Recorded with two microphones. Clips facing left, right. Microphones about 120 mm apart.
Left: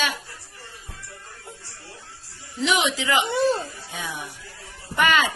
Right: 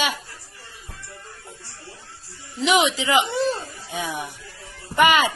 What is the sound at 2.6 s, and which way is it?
Speech, 15° right (ahead or behind).